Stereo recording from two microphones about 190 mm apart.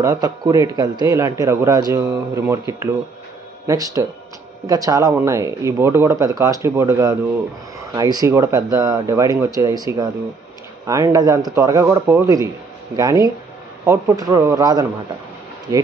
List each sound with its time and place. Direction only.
0.0 s a man's voice: 15° right (ahead or behind)